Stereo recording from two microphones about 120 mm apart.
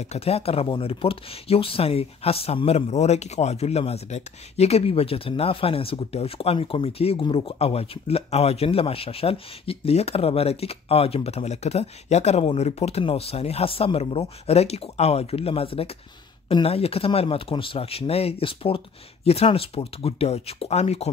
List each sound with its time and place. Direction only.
0.0 s speech: 60° left (ahead or behind)